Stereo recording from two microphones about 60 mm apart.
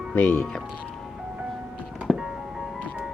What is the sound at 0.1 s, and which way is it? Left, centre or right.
Speech, left.